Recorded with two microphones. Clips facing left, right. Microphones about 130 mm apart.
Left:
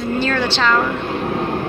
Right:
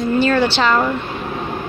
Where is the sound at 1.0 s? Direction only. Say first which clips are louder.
Left 4 dB; 70° left (ahead or behind).